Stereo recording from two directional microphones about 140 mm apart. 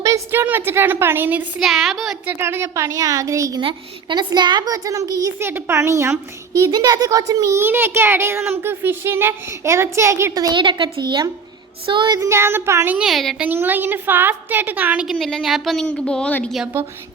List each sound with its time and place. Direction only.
0.0 s a woman's voice: 20° right (ahead or behind); by 2.3 s centre (ahead or behind)
2.4 s a woman's voice: 20° right (ahead or behind)
3.6 s a woman's voice: 35° right (ahead or behind); by 13.1 s 15° right (ahead or behind)
13.1 s a woman's voice: centre (ahead or behind)
13.5 s a woman's voice: 15° right (ahead or behind)
15.0 s a woman's voice: centre (ahead or behind)